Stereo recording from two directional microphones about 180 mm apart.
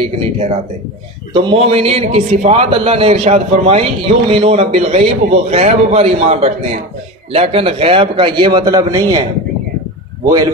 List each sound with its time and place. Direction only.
0.0 s a man's voice: 30° right (ahead or behind)
10.2 s a man's voice: 20° right (ahead or behind)